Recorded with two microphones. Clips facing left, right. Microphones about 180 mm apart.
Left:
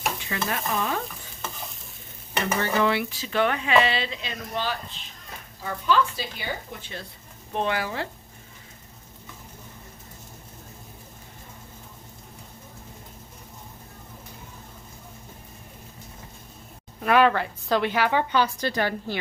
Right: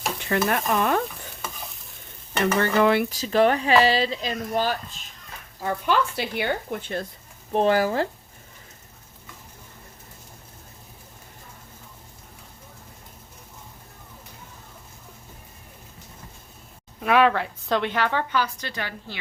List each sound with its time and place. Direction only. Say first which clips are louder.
0.3 s speech: right 10 dB; 60° right (ahead or behind)
2.6 s speech: right 4 dB; 50° right (ahead or behind)
5.6 s speech: even; 60° right (ahead or behind)
7.5 s speech: right 7 dB; 40° right (ahead or behind)
17.0 s a woman's voice: even; centre (ahead or behind)
18.3 s a woman's voice: left 4 dB; 30° left (ahead or behind)